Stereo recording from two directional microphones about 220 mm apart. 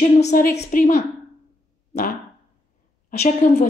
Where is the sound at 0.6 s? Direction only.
35° left (ahead or behind).